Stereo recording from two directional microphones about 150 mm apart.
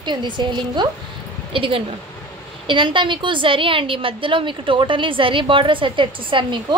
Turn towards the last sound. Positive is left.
turn(degrees=-35)  # may be behind; listen again after turning